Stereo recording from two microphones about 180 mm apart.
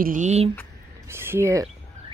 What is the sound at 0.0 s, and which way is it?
Speech, 45° right (ahead or behind).